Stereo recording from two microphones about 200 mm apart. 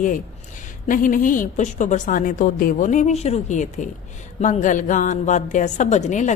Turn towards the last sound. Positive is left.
turn(degrees=35)  # may be behind; listen again after turning